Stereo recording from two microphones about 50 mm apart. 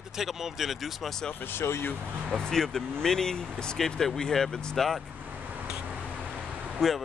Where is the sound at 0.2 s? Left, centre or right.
Centre.